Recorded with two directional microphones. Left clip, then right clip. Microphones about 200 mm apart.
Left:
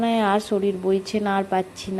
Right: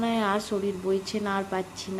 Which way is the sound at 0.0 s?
15° left (ahead or behind).